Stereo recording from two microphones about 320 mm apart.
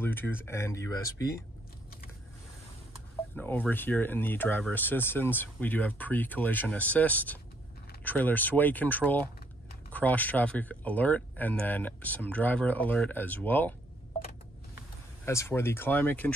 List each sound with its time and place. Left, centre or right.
0.0 s speech: centre
3.3 s speech: centre
15.2 s speech: centre